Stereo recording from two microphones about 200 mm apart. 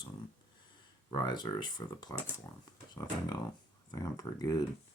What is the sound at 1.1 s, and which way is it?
Speech, 20° left (ahead or behind).